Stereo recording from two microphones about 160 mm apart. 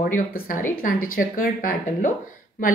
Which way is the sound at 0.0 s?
60° left (ahead or behind).